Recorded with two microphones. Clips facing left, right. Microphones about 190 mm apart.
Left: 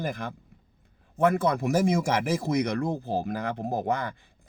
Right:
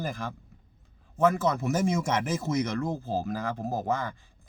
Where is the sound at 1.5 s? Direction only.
15° left (ahead or behind).